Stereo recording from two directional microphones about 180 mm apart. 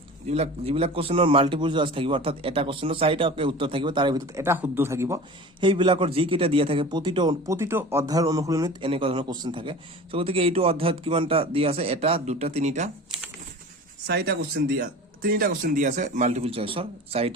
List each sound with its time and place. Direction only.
0.3 s a man's voice: 35° right (ahead or behind)
4.4 s speech: 15° right (ahead or behind)
5.5 s a man's voice: 25° right (ahead or behind)
14.1 s speech: 60° right (ahead or behind); by 17.3 s 35° right (ahead or behind)